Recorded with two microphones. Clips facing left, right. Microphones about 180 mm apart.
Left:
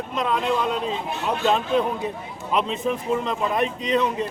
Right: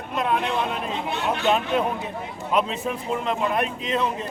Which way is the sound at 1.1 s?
80° right.